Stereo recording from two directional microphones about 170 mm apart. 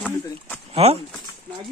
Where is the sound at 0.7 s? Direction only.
35° right (ahead or behind).